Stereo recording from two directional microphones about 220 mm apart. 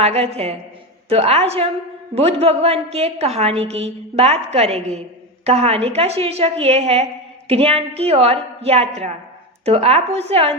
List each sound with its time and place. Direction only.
0.0 s a woman's voice: 30° right (ahead or behind)